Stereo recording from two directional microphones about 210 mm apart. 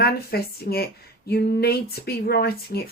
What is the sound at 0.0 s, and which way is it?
Speech, 50° left (ahead or behind).